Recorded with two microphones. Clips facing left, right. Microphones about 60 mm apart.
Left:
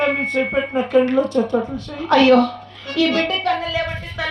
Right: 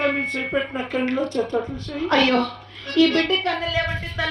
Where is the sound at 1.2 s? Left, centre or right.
Left.